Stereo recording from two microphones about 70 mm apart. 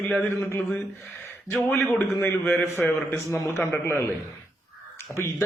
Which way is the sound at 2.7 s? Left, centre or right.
Left.